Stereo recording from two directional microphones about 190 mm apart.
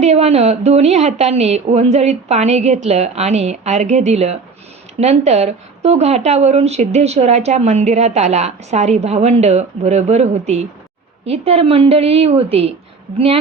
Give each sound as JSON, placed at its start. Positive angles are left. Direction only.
{"t": 0.0, "sound": "speech", "side_deg": -35}